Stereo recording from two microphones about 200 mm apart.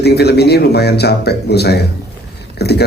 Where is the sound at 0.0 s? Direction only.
55° left (ahead or behind).